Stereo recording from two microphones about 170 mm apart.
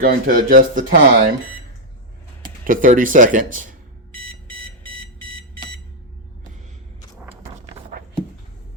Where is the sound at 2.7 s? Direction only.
50° right (ahead or behind).